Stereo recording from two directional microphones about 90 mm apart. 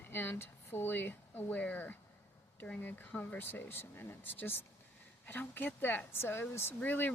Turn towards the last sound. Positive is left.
turn(degrees=20)  # may be behind; listen again after turning